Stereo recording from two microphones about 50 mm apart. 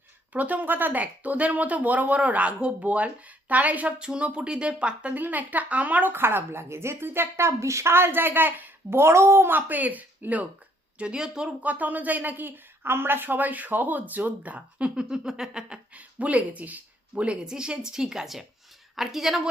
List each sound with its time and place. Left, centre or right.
0.3 s speech: right
1.0 s speech: right
4.0 s speech: centre
5.1 s speech: right
6.1 s speech: right
7.9 s a woman's voice: right
9.0 s speech: right
9.5 s a woman's voice: right; by 11.5 s centre
11.6 s speech: right
14.9 s a woman's voice: centre
16.0 s speech: right
17.4 s a woman's voice: centre